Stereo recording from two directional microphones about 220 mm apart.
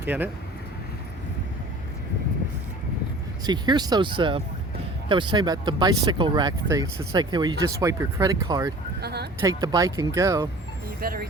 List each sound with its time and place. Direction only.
0.0 s speech: 10° right (ahead or behind)
3.4 s speech: 20° right (ahead or behind)
9.0 s speech: 50° right (ahead or behind)
9.4 s speech: 15° right (ahead or behind)
10.8 s speech: 40° right (ahead or behind)